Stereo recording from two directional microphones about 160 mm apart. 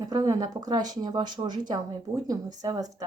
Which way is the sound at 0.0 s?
25° right (ahead or behind).